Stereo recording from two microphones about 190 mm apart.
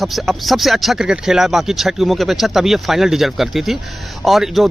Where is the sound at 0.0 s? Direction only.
Centre (ahead or behind).